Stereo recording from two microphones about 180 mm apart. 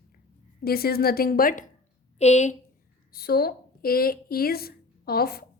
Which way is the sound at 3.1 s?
60° left (ahead or behind).